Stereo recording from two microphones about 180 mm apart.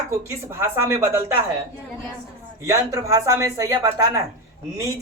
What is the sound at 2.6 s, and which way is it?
A man's voice, 15° right (ahead or behind).